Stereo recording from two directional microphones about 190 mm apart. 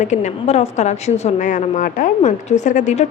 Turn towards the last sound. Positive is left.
turn(degrees=35)  # may be behind; listen again after turning